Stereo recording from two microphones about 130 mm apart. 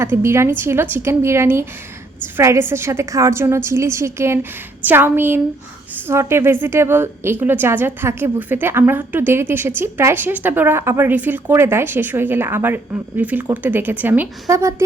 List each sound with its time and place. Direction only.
0.0 s a woman's voice: 20° right (ahead or behind)
14.4 s a woman's voice: 25° right (ahead or behind)